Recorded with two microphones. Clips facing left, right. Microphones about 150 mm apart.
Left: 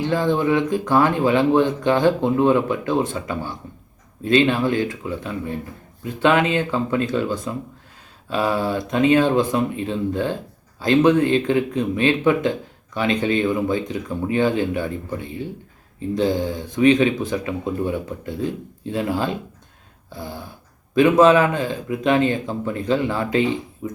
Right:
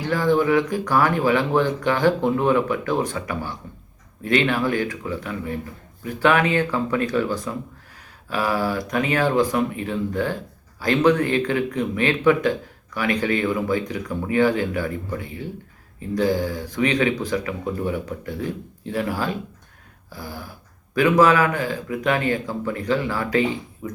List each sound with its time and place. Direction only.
0.0 s speech: 25° left (ahead or behind)
20.1 s dog: 25° left (ahead or behind)
20.9 s speech: 25° left (ahead or behind)